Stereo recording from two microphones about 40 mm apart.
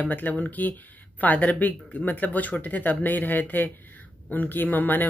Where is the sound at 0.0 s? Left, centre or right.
Left.